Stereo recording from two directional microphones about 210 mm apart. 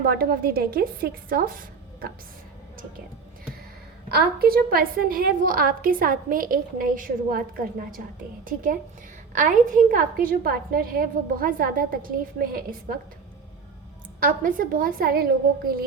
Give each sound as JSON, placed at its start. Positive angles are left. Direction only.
{"t": 0.0, "sound": "a woman's voice", "side_deg": -45}
{"t": 4.1, "sound": "a woman's voice", "side_deg": -50}
{"t": 9.3, "sound": "a woman's voice", "side_deg": -40}
{"t": 14.2, "sound": "a woman's voice", "side_deg": -40}